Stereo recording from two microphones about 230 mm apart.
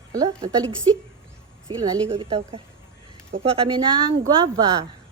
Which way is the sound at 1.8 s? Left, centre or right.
Centre.